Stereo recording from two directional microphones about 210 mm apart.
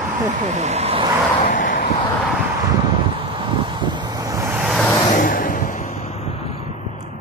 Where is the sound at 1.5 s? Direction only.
40° left (ahead or behind).